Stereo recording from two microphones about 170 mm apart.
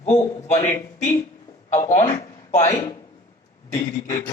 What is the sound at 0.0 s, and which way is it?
Speech, 40° left (ahead or behind).